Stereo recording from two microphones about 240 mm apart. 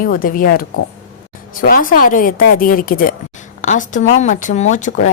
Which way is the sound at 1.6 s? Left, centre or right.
Left.